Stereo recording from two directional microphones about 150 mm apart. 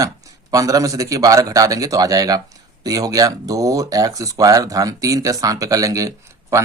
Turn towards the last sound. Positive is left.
turn(degrees=-20)  # may be behind; listen again after turning